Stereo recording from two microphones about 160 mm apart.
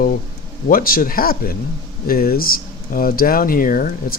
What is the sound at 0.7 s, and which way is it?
Speech, 65° left (ahead or behind).